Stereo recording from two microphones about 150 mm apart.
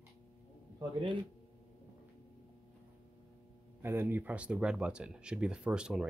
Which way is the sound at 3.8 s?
15° right (ahead or behind).